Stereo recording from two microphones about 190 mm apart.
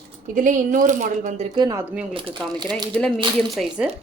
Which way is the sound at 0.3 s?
45° right (ahead or behind).